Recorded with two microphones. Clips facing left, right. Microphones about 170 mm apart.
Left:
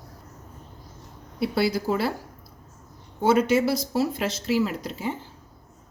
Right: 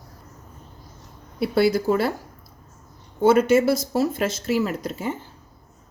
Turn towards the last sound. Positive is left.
turn(degrees=-50)  # may be behind; listen again after turning